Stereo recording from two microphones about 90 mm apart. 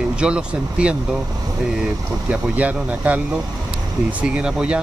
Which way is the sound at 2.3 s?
15° right (ahead or behind).